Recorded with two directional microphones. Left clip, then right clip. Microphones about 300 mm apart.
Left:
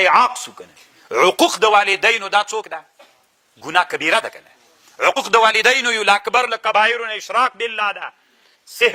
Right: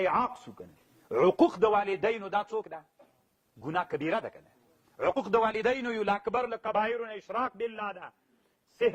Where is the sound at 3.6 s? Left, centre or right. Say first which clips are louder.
Left 14 dB; centre.